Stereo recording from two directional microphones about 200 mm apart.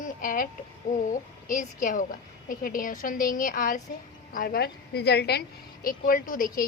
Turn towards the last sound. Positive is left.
turn(degrees=45)  # may be behind; listen again after turning